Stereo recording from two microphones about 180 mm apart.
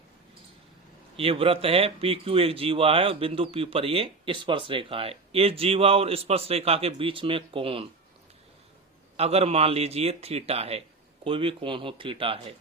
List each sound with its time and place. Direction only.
1.1 s speech: 30° right (ahead or behind)
9.1 s speech: 35° right (ahead or behind)